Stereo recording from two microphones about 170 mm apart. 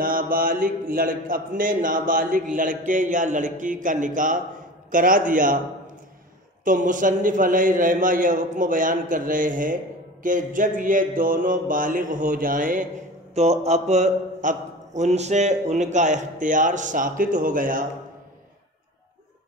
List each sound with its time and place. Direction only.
0.0 s a man's voice: 55° right (ahead or behind)
6.6 s a man's voice: 50° right (ahead or behind)
13.3 s a man's voice: 40° right (ahead or behind)